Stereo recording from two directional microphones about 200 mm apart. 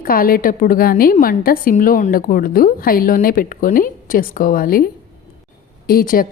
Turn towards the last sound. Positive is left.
turn(degrees=45)  # may be behind; listen again after turning